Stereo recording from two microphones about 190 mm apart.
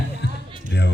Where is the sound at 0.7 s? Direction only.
65° left (ahead or behind).